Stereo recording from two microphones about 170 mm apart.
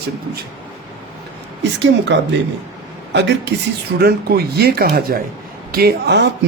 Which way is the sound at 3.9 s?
65° right (ahead or behind).